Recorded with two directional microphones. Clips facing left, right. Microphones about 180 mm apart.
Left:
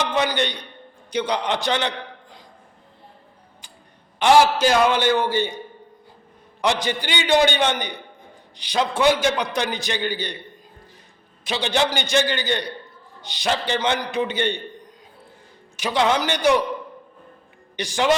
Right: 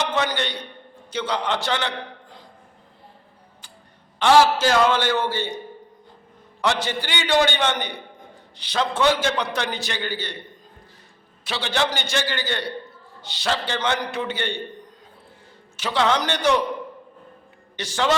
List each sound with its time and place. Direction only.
0.1 s a man's voice: 15° left (ahead or behind)
4.2 s a man's voice: 15° left (ahead or behind)
6.6 s a man's voice: 15° left (ahead or behind)
11.4 s a man's voice: 15° left (ahead or behind)
15.7 s a man's voice: 15° left (ahead or behind)
17.7 s a man's voice: 15° left (ahead or behind)